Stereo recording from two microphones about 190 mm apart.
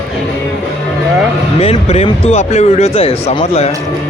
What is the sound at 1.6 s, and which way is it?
Speech, 30° left (ahead or behind).